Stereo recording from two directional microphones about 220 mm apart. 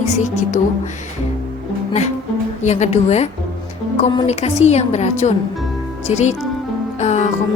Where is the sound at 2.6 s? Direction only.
30° left (ahead or behind).